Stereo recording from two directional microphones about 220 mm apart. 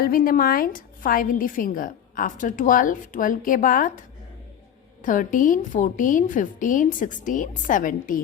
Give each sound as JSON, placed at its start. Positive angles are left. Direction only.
{"t": 0.0, "sound": "a woman's voice", "side_deg": 40}
{"t": 5.0, "sound": "a woman's voice", "side_deg": 35}